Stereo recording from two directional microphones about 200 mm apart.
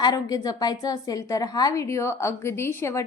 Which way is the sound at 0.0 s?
20° left (ahead or behind).